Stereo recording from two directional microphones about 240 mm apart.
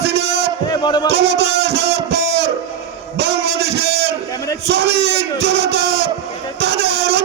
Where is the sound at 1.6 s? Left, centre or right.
Right.